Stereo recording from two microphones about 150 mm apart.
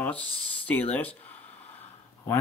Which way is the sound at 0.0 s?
10° left (ahead or behind).